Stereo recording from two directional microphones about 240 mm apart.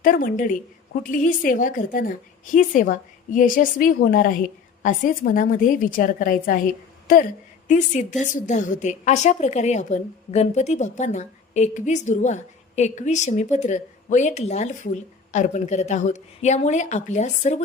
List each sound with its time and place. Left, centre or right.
0.0 s a woman's voice: left